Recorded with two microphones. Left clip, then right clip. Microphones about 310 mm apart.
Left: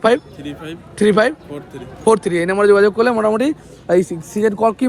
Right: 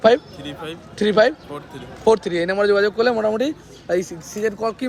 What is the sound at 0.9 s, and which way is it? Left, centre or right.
Speech, left.